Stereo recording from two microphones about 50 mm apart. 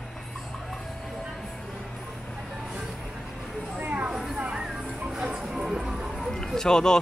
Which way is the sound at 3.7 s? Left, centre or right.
Right.